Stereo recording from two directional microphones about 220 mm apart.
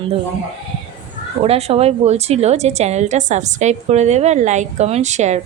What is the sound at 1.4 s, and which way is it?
A woman's voice, 25° right (ahead or behind).